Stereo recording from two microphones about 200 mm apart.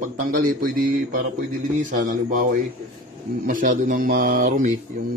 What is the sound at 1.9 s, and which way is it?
A man's voice, 40° right (ahead or behind).